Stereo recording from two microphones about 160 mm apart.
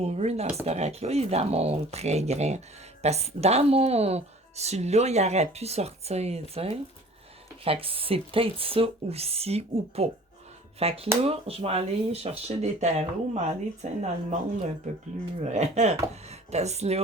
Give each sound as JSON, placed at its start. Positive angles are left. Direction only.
{"t": 0.0, "sound": "speech", "side_deg": -40}
{"t": 15.4, "sound": "speech", "side_deg": -45}